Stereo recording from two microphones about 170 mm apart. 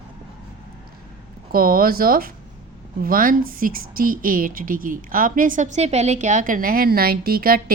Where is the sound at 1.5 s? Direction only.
60° right (ahead or behind).